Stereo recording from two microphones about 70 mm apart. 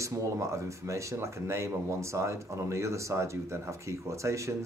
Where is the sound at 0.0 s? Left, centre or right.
Right.